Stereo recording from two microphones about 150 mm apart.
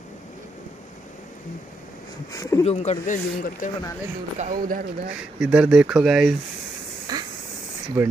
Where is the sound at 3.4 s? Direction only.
60° left (ahead or behind).